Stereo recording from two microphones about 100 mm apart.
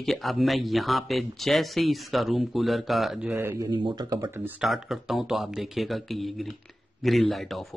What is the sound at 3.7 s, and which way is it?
Speech, 55° right (ahead or behind).